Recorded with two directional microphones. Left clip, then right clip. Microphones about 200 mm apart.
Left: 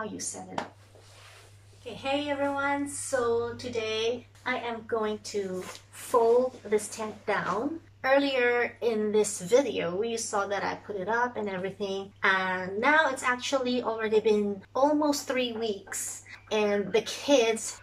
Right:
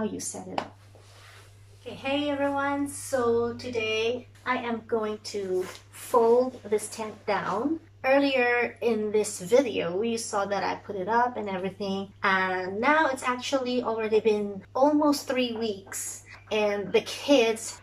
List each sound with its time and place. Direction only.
1.9 s a woman's voice: centre (ahead or behind)